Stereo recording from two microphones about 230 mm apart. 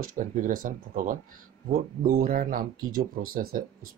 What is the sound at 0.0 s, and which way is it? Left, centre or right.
Speech, right.